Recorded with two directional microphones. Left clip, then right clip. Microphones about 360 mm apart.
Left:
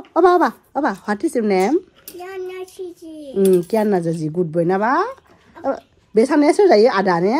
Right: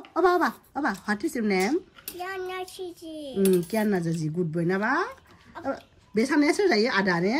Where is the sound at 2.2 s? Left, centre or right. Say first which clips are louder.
Left 3 dB; centre.